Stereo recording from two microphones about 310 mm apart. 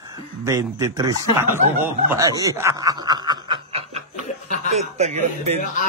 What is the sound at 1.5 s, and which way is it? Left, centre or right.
Snicker, centre.